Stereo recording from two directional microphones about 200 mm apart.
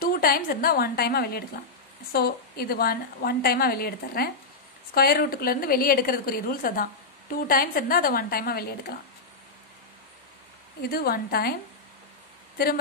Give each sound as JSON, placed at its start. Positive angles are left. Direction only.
{"t": 0.0, "sound": "a woman's voice", "side_deg": 50}
{"t": 10.9, "sound": "a woman's voice", "side_deg": 50}